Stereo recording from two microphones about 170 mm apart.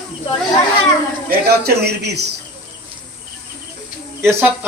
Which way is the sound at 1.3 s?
65° right (ahead or behind).